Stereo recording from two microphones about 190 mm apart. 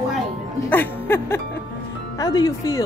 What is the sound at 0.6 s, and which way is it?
Speech, 10° left (ahead or behind).